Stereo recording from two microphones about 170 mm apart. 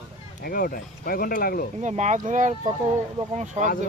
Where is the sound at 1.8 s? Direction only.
45° right (ahead or behind).